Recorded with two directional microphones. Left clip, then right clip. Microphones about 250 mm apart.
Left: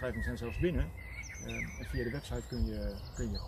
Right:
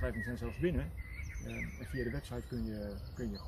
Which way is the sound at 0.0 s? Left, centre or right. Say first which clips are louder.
Left 2 dB; centre.